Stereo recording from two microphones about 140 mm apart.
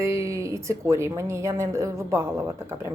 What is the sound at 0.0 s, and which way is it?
Speech, 20° right (ahead or behind).